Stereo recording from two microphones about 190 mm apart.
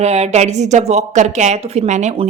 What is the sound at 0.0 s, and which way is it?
A woman's voice, 35° right (ahead or behind).